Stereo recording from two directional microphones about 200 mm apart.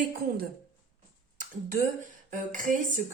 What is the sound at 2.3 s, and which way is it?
Speech, 40° right (ahead or behind).